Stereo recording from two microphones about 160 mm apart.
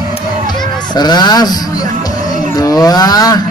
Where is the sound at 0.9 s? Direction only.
25° left (ahead or behind).